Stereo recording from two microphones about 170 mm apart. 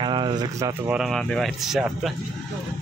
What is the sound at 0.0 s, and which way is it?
Speech, 25° right (ahead or behind).